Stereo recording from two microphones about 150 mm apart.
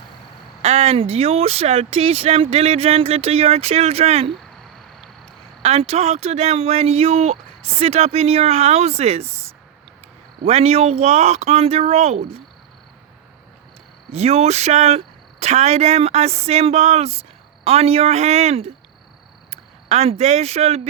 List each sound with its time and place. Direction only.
0.6 s speech: 45° right (ahead or behind)
5.6 s speech: 45° right (ahead or behind)
14.1 s speech: 45° right (ahead or behind)